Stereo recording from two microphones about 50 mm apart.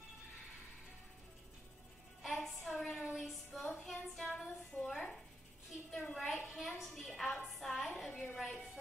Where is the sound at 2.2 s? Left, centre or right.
Centre.